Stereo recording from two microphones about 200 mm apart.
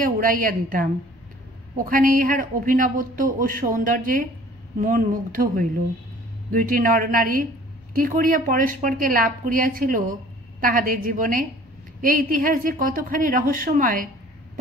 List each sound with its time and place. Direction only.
0.0 s speech: 45° right (ahead or behind)